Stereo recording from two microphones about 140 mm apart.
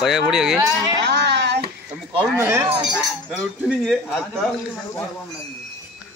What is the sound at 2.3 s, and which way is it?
Speech, 20° right (ahead or behind).